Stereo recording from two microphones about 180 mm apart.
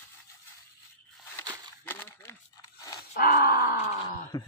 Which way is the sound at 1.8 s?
10° left (ahead or behind).